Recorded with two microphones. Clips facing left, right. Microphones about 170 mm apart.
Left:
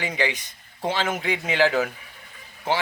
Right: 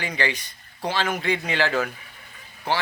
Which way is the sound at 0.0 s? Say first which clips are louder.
Left 1 dB; 20° left (ahead or behind).